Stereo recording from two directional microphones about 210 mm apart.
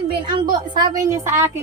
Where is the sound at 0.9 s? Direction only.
15° right (ahead or behind).